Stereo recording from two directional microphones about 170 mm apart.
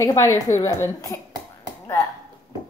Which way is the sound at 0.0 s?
20° left (ahead or behind).